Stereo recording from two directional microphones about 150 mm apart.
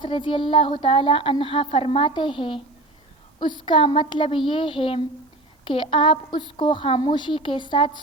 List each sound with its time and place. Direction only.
0.0 s a woman's voice: 35° left (ahead or behind)
3.7 s a woman's voice: 35° left (ahead or behind)